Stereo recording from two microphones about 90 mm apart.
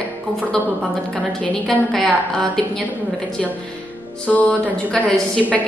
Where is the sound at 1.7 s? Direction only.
Centre (ahead or behind).